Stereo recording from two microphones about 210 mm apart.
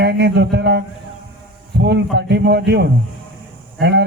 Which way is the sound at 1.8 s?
55° right (ahead or behind).